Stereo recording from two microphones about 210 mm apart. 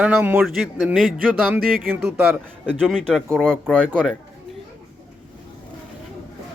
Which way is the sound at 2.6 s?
5° left (ahead or behind).